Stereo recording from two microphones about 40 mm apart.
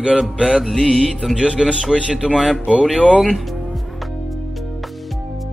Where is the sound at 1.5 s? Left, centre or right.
Centre.